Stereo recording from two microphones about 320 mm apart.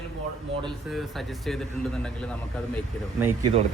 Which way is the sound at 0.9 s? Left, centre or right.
Centre.